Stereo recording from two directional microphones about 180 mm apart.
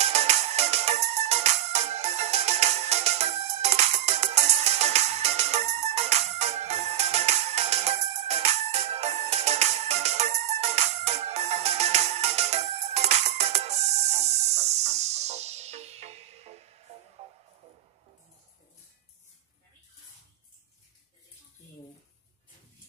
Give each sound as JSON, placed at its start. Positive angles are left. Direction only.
{"t": 0.0, "sound": "music", "side_deg": -35}